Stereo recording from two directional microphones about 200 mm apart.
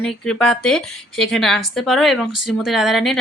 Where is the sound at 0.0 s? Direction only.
5° left (ahead or behind).